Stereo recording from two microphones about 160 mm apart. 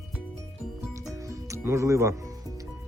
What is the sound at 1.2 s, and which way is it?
Music, 20° right (ahead or behind).